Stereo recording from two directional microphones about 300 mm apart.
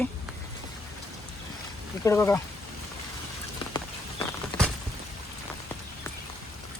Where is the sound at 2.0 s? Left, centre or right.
Centre.